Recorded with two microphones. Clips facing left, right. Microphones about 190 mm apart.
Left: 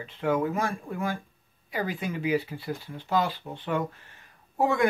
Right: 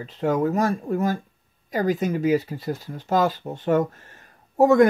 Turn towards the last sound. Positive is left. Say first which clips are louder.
# right 10 dB
turn(degrees=-45)  # may be behind; listen again after turning